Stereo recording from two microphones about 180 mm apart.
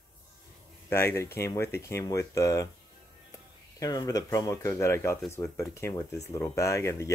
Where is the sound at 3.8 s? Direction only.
20° left (ahead or behind).